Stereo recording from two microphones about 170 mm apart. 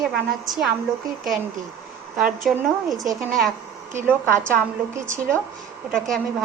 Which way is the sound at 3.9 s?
15° right (ahead or behind).